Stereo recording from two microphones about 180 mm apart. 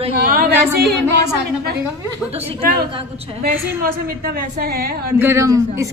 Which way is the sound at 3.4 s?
55° right (ahead or behind).